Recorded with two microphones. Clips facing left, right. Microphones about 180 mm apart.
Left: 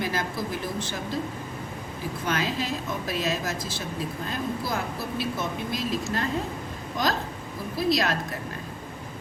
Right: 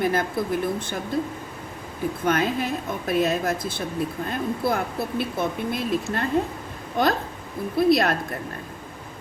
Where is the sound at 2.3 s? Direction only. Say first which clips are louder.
Right 5 dB; 55° right (ahead or behind).